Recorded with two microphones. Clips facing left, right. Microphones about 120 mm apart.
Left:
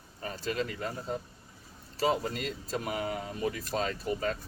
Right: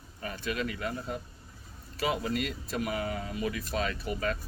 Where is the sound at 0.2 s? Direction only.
35° left (ahead or behind).